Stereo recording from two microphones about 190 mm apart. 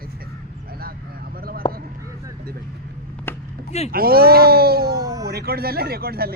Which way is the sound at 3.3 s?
10° left (ahead or behind).